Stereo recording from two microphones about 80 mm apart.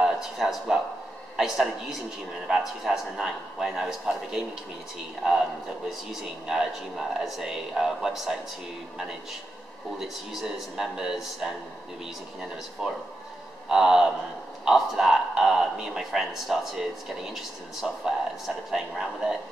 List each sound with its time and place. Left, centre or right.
0.0 s a man's voice: centre
6.4 s a man's voice: centre
9.9 s a man's voice: centre
12.8 s a man's voice: centre